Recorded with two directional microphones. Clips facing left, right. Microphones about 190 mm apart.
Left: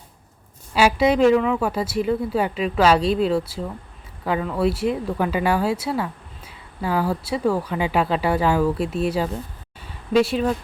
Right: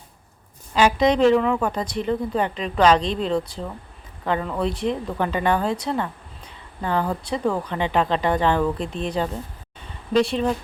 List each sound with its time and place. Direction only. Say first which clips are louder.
0.7 s speech: even; 10° left (ahead or behind)